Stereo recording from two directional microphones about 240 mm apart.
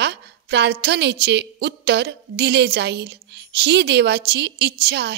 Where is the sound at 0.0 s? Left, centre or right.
Right.